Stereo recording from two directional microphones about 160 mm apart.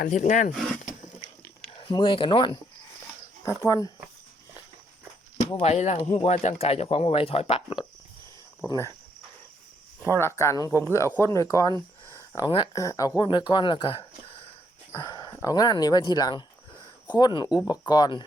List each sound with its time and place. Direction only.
0.0 s speech: 55° left (ahead or behind)
0.5 s speech: 5° left (ahead or behind)
1.8 s speech: 30° left (ahead or behind)
3.4 s speech: 20° left (ahead or behind)
5.5 s speech: 40° left (ahead or behind)
8.6 s speech: 20° left (ahead or behind)
10.1 s speech: 15° left (ahead or behind)
12.1 s a sound: 20° left (ahead or behind)
12.7 s speech: 20° left (ahead or behind)